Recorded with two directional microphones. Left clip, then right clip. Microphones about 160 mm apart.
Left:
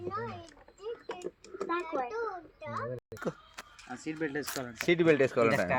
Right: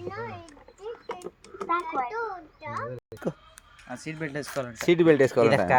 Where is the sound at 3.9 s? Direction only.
90° right.